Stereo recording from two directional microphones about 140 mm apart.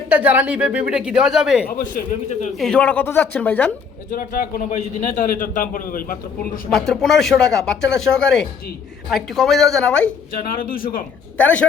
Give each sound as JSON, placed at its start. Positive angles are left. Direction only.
{"t": 0.1, "sound": "a woman's voice", "side_deg": -10}
{"t": 1.8, "sound": "a man's voice", "side_deg": 65}
{"t": 2.6, "sound": "a woman's voice", "side_deg": 5}
{"t": 4.1, "sound": "a man's voice", "side_deg": 90}
{"t": 4.8, "sound": "a man's voice", "side_deg": 65}
{"t": 6.7, "sound": "speech", "side_deg": 5}
{"t": 10.5, "sound": "a man's voice", "side_deg": 90}
{"t": 11.3, "sound": "a woman's voice", "side_deg": 10}